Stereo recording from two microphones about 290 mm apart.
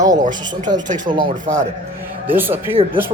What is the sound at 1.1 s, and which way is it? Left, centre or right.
Speech, centre.